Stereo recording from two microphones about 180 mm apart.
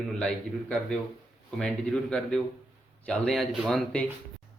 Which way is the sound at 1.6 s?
5° left (ahead or behind).